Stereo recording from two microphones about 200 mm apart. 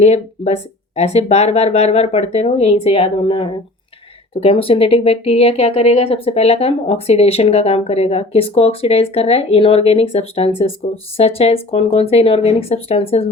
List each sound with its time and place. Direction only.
0.0 s speech: 35° left (ahead or behind)